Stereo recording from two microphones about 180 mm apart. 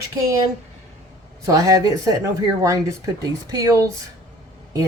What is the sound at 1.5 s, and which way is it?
A woman's voice, 20° right (ahead or behind).